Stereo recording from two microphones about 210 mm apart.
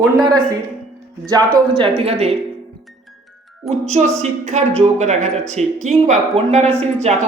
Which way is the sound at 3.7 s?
35° right (ahead or behind).